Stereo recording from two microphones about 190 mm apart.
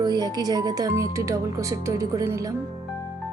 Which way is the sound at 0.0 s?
20° right (ahead or behind).